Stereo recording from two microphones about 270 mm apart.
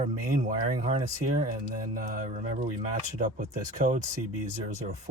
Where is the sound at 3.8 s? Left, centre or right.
Right.